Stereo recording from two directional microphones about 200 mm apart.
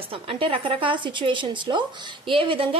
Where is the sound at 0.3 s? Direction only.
25° right (ahead or behind).